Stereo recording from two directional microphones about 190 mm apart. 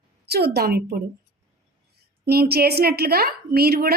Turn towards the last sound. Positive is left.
turn(degrees=-55)  # may be behind; listen again after turning